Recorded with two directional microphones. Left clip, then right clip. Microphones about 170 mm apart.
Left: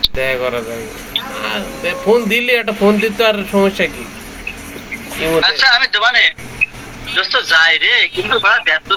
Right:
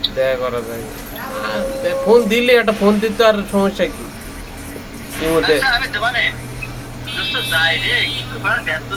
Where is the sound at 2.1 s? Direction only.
5° right (ahead or behind).